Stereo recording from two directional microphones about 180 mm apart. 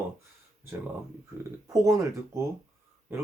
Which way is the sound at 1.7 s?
15° right (ahead or behind).